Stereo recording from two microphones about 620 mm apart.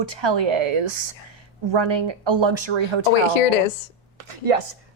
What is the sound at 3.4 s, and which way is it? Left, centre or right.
Speech, left.